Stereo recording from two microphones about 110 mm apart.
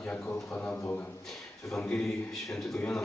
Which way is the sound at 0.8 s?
15° left (ahead or behind).